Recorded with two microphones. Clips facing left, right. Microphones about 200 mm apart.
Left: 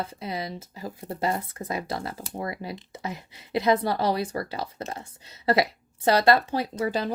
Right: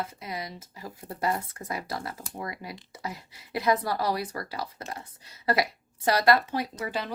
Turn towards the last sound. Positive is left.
turn(degrees=35)  # may be behind; listen again after turning